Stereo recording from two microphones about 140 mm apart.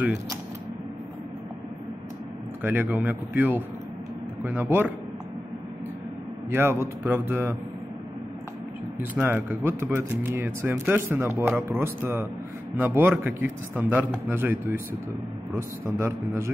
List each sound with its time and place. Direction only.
2.6 s speech: 15° right (ahead or behind)
6.5 s speech: 15° right (ahead or behind)
9.1 s a man's voice: 15° right (ahead or behind)